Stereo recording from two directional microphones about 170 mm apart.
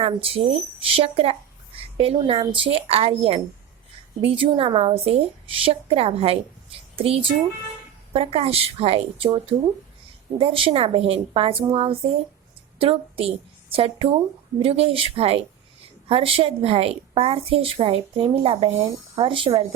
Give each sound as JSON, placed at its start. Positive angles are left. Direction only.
{"t": 0.0, "sound": "a woman's voice", "side_deg": -35}